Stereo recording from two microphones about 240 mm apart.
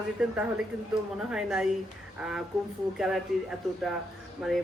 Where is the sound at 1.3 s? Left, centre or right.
Centre.